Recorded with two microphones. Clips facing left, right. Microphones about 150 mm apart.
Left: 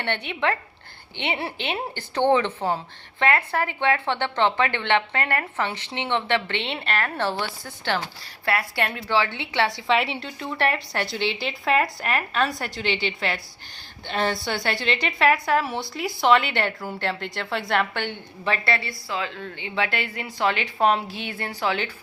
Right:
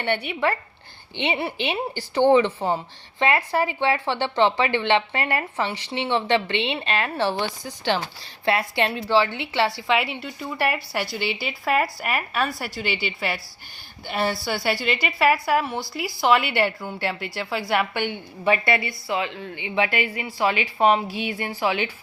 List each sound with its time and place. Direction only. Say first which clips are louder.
0.0 s a woman's voice: right 2 dB; 10° right (ahead or behind)
18.9 s a woman's voice: right 3 dB; 25° right (ahead or behind)
19.4 s a woman's voice: right 3 dB; 10° right (ahead or behind)